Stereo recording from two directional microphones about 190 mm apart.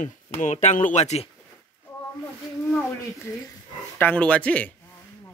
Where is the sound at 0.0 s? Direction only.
40° left (ahead or behind).